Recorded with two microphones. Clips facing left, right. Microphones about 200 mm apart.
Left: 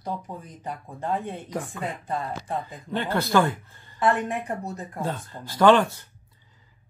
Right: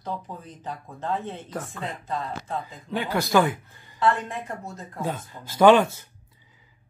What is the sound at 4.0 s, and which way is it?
Speech, 20° left (ahead or behind).